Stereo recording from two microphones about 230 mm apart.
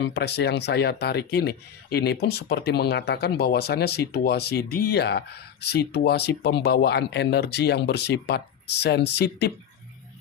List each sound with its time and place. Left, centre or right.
0.0 s speech: left